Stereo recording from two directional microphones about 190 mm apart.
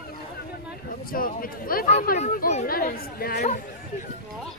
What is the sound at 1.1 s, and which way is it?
Speech, 50° left (ahead or behind).